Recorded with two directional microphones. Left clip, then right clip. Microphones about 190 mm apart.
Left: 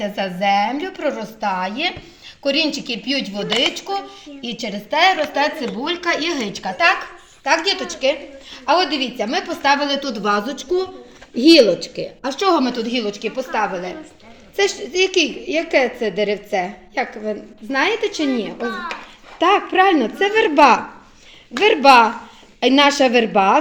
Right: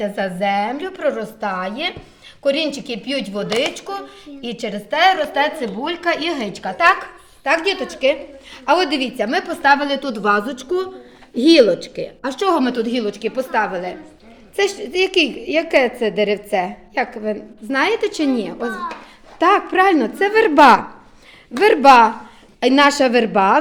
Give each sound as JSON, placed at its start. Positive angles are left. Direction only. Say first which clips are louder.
{"t": 0.0, "sound": "a woman's voice", "louder": "even", "side_deg": -5}
{"t": 11.9, "sound": "a woman's voice", "louder": "even", "side_deg": 0}
{"t": 20.5, "sound": "a woman's voice", "louder": "right 3 dB", "side_deg": -20}